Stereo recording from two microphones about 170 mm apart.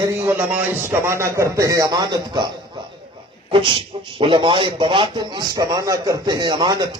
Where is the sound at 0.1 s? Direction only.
15° right (ahead or behind).